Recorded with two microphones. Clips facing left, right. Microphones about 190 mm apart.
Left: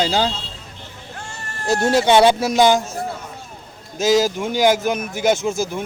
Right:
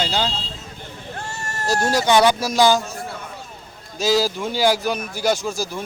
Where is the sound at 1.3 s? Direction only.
40° right (ahead or behind).